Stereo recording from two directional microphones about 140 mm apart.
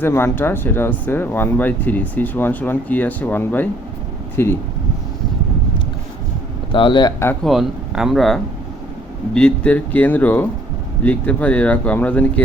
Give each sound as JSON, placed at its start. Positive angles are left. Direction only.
{"t": 0.0, "sound": "speech", "side_deg": 15}
{"t": 6.7, "sound": "a man's voice", "side_deg": 35}
{"t": 7.4, "sound": "speech", "side_deg": -5}